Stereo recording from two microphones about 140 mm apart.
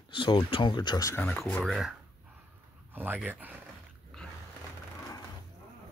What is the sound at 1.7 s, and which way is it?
Speech, centre (ahead or behind).